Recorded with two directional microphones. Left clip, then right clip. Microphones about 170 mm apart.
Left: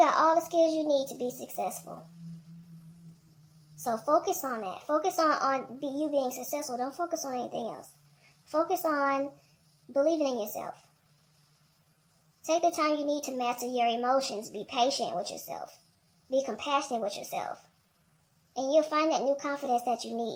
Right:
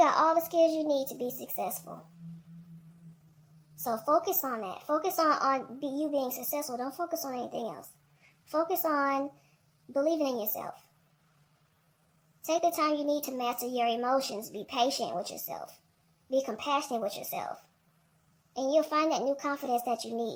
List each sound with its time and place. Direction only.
0.0 s a child's voice: 35° right (ahead or behind)
3.8 s speech: 35° right (ahead or behind)
12.4 s speech: 35° right (ahead or behind)